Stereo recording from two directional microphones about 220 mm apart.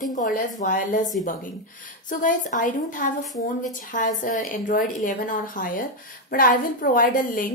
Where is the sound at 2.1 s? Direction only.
35° left (ahead or behind).